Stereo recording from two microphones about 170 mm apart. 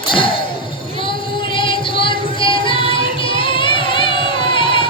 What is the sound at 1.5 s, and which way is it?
Music, 30° left (ahead or behind).